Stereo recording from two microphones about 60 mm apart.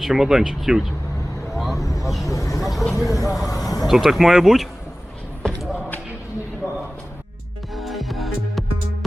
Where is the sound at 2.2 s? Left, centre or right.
Left.